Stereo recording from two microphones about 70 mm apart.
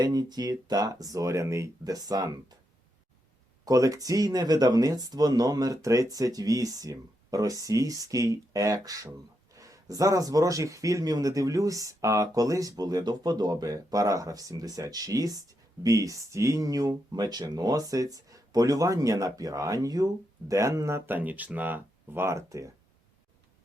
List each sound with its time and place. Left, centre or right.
0.0 s speech: right
1.8 s speech: right
3.7 s speech: right
17.1 s speech: right
21.1 s speech: right